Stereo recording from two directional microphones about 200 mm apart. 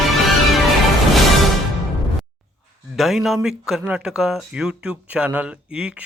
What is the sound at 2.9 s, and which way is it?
Speech, centre (ahead or behind).